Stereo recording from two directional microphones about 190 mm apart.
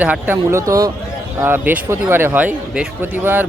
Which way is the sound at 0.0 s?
10° right (ahead or behind).